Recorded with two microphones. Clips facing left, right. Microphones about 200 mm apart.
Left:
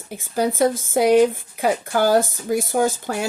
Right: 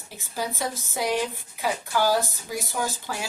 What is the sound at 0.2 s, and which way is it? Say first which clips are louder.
Speech: left 11 dB; 50° left (ahead or behind).